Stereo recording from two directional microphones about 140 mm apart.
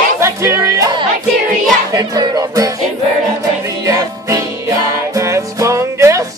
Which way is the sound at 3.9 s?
25° right (ahead or behind).